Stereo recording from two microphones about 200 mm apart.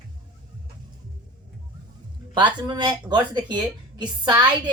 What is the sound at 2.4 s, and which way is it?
Speech, 20° right (ahead or behind).